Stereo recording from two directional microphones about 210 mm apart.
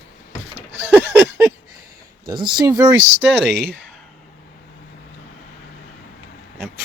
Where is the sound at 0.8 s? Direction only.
10° right (ahead or behind).